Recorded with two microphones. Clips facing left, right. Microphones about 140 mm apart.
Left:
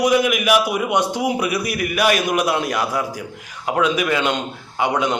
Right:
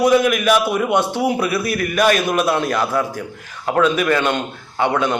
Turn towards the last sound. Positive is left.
turn(degrees=15)  # may be behind; listen again after turning